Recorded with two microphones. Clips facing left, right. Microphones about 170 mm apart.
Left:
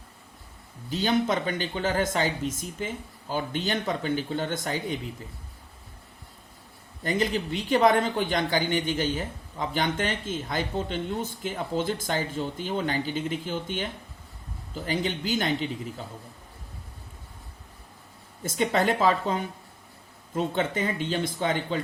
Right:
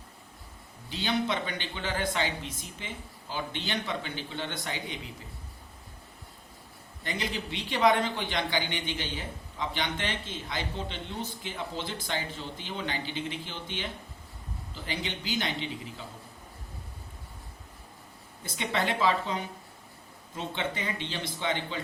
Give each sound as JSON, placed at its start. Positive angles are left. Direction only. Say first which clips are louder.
{"t": 0.9, "sound": "a man's voice", "louder": "left 5 dB", "side_deg": 45}
{"t": 7.0, "sound": "a man's voice", "louder": "left 8 dB", "side_deg": 45}
{"t": 14.8, "sound": "a man's voice", "louder": "left 7 dB", "side_deg": 50}
{"t": 18.4, "sound": "a man's voice", "louder": "left 6 dB", "side_deg": 45}